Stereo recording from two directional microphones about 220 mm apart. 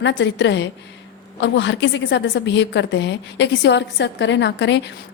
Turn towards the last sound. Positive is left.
turn(degrees=55)  # may be behind; listen again after turning